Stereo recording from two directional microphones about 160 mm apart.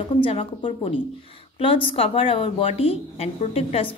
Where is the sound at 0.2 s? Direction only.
35° left (ahead or behind).